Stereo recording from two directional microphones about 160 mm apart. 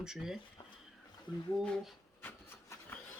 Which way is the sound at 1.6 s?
Centre (ahead or behind).